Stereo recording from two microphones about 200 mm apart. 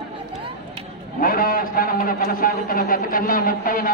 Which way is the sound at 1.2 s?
45° left (ahead or behind).